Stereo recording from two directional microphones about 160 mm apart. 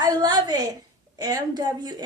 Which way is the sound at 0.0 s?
25° right (ahead or behind).